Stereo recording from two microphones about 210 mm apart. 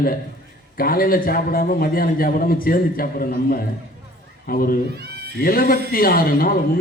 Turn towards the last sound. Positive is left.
turn(degrees=45)  # may be behind; listen again after turning